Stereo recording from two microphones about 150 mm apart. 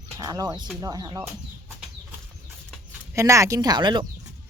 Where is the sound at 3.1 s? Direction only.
20° right (ahead or behind).